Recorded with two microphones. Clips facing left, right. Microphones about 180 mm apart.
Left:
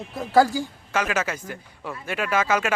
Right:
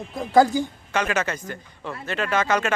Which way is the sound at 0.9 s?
5° left (ahead or behind).